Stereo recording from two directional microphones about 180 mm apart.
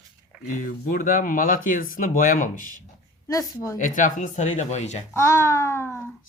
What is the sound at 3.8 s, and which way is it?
Speech, 45° left (ahead or behind).